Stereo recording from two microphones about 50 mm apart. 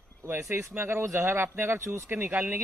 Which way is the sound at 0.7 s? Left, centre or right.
Right.